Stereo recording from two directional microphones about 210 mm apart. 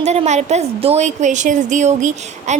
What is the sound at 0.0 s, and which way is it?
A woman's voice, 30° right (ahead or behind).